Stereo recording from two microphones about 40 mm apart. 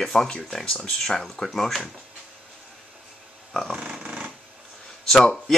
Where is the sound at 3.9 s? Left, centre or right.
Right.